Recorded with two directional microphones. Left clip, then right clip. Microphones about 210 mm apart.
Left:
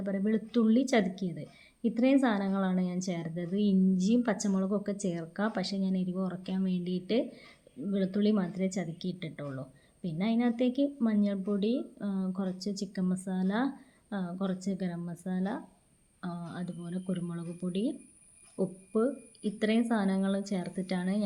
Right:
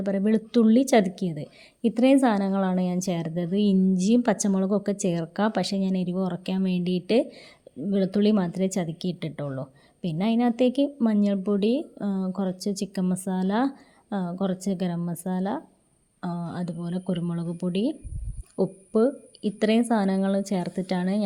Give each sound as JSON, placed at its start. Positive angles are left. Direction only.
{"t": 0.0, "sound": "a woman's voice", "side_deg": -35}